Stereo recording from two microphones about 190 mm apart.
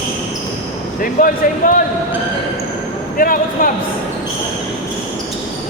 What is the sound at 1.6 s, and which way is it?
Speech, 45° left (ahead or behind).